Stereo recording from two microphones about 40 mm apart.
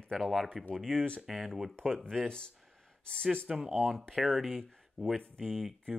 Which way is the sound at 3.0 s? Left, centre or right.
Left.